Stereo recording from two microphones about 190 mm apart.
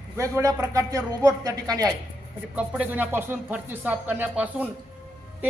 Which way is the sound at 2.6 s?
10° right (ahead or behind).